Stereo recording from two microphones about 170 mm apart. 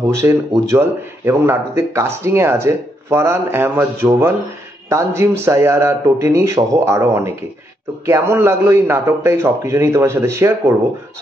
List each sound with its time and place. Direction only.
0.1 s speech: 15° right (ahead or behind)